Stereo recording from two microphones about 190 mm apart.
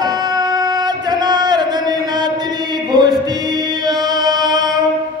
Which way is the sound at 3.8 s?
20° right (ahead or behind).